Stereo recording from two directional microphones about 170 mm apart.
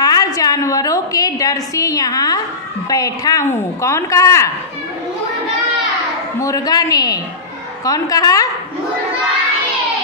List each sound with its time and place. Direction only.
0.0 s a woman's voice: 20° left (ahead or behind)
6.4 s a woman's voice: 20° left (ahead or behind)